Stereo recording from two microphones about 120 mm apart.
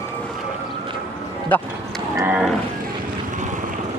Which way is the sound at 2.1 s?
15° right (ahead or behind).